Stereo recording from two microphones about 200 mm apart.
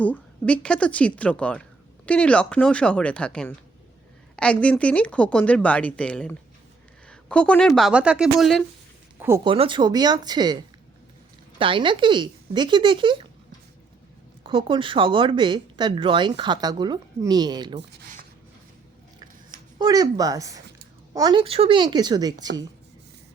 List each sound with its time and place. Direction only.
0.0 s speech: 5° left (ahead or behind)
9.1 s speech: 10° right (ahead or behind)
9.4 s speech: 25° right (ahead or behind)
11.6 s speech: 25° right (ahead or behind)
14.4 s speech: 25° right (ahead or behind)
19.8 s speech: 20° right (ahead or behind)